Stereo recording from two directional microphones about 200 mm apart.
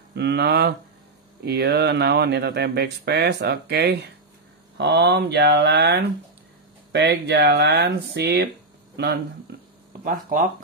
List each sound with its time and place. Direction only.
0.1 s speech: 55° right (ahead or behind)